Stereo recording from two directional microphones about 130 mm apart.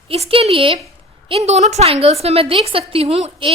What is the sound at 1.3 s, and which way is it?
A woman's voice, 55° right (ahead or behind).